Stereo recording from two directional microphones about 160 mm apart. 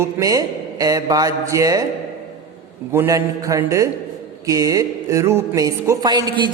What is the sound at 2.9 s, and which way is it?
Music, 20° right (ahead or behind).